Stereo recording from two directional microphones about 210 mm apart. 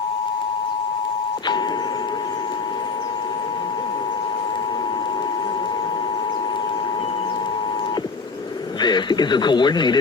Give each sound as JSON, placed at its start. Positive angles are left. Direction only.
{"t": 8.8, "sound": "speech", "side_deg": 20}